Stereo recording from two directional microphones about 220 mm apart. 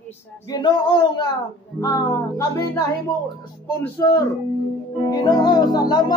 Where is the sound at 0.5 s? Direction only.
20° left (ahead or behind).